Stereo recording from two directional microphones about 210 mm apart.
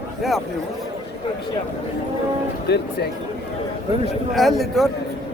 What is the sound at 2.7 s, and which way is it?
Speech, 50° left (ahead or behind).